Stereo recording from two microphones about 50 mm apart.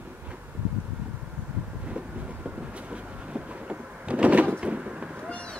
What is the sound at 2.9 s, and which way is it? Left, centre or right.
Sliding door, right.